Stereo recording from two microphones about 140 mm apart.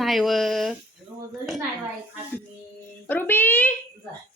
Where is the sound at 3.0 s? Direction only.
15° left (ahead or behind).